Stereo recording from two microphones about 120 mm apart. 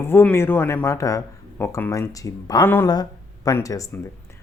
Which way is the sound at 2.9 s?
30° left (ahead or behind).